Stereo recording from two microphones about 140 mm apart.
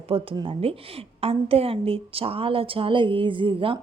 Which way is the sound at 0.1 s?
40° right (ahead or behind).